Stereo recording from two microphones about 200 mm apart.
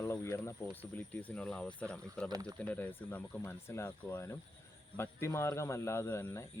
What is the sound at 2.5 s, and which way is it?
Speech, 5° left (ahead or behind).